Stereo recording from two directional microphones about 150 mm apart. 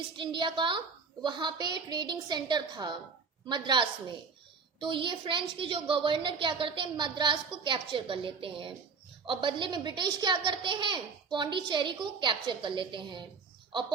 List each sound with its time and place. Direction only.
0.2 s a woman's voice: 35° right (ahead or behind)